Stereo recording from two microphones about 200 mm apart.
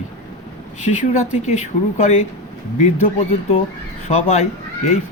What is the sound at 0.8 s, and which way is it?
Speech, 35° left (ahead or behind).